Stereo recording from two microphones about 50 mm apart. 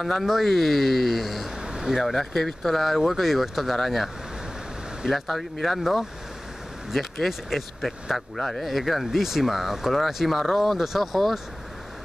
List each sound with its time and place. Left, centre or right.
0.0 s speech: centre
1.6 s a sound: centre
2.0 s speech: centre